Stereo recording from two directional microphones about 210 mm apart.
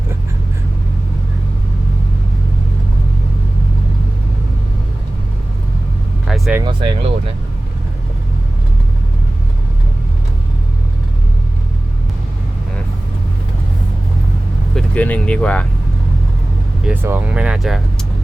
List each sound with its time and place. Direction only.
6.2 s vehicle: centre (ahead or behind)
6.6 s speech: 25° right (ahead or behind)
14.8 s speech: 5° left (ahead or behind)
16.8 s speech: 10° right (ahead or behind)